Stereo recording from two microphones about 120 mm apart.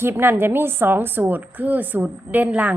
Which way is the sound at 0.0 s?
20° right (ahead or behind).